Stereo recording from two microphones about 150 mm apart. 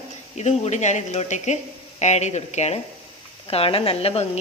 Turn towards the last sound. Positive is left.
turn(degrees=40)  # may be behind; listen again after turning